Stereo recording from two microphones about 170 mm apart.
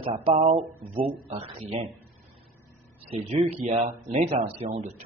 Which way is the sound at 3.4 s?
35° right (ahead or behind).